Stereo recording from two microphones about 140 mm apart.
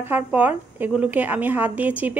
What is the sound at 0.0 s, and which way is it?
A woman's voice, 10° right (ahead or behind).